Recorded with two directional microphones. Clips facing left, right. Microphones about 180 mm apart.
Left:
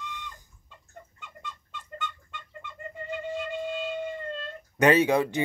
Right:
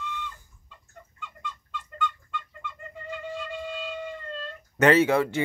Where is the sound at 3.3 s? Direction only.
20° left (ahead or behind).